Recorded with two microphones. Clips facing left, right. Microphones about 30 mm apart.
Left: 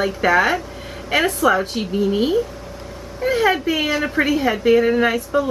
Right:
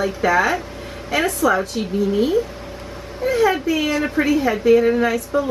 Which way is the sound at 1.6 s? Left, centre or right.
Left.